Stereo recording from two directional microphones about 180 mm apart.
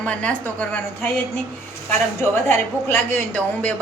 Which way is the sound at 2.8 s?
10° left (ahead or behind).